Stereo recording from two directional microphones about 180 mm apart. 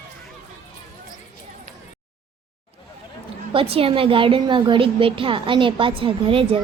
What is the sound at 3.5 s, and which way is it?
A woman's voice, 30° right (ahead or behind).